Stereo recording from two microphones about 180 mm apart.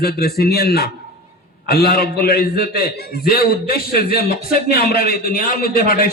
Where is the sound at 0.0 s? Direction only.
60° left (ahead or behind).